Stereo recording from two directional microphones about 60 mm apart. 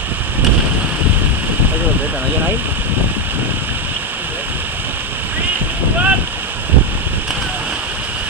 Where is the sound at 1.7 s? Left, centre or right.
Right.